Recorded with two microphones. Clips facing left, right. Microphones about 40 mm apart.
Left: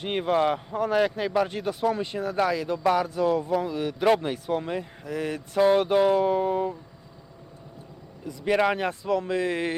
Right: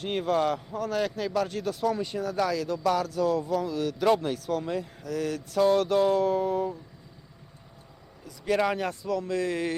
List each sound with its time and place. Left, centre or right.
0.0 s speech: left
8.3 s speech: left